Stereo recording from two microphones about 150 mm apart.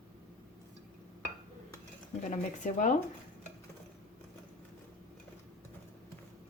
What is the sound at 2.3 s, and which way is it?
Speech, 55° left (ahead or behind).